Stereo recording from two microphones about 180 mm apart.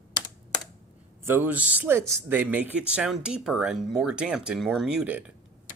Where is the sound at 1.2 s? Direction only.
10° right (ahead or behind).